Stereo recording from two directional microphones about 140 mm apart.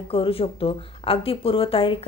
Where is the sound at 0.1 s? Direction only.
40° left (ahead or behind).